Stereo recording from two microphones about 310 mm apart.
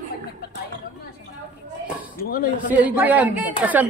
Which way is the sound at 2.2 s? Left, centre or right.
Left.